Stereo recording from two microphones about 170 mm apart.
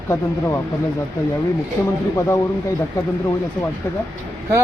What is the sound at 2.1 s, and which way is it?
Speech, 15° left (ahead or behind).